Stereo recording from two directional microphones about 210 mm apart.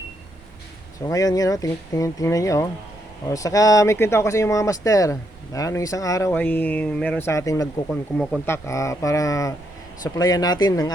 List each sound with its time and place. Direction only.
1.0 s speech: 15° left (ahead or behind)